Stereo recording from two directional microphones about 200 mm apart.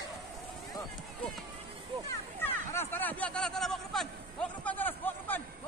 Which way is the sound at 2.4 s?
10° left (ahead or behind).